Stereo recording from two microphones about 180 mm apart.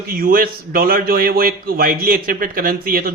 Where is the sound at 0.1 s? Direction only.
55° right (ahead or behind).